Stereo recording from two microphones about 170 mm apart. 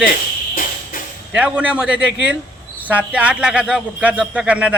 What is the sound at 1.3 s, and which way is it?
A man's voice, 5° right (ahead or behind).